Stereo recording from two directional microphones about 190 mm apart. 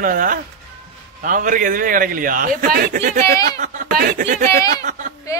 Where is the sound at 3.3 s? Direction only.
20° left (ahead or behind).